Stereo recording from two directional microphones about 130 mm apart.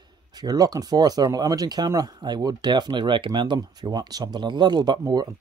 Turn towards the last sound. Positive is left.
turn(degrees=-30)  # may be behind; listen again after turning